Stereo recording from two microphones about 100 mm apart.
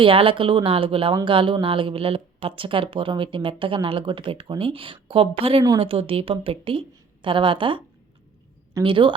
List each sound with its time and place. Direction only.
0.0 s speech: 65° right (ahead or behind)
8.8 s speech: 55° right (ahead or behind)